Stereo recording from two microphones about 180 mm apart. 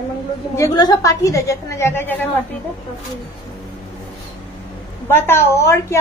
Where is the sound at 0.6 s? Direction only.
20° left (ahead or behind).